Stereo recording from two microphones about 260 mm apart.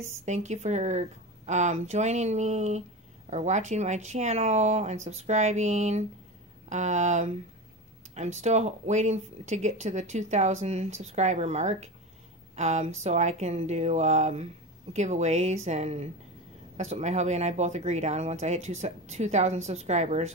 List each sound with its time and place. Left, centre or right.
0.0 s speech: right